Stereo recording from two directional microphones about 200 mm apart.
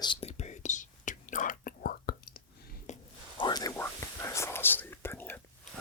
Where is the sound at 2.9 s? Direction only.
35° left (ahead or behind).